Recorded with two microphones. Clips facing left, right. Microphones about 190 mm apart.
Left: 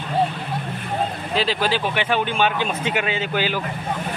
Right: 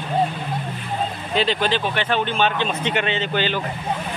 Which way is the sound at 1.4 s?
5° left (ahead or behind).